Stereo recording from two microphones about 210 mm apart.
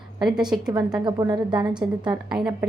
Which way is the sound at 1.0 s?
20° right (ahead or behind).